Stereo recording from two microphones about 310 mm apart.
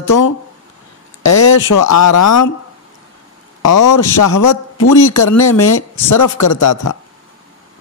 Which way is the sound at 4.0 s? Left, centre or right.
Left.